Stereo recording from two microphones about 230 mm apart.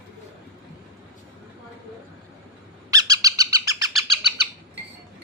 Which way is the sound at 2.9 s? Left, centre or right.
Centre.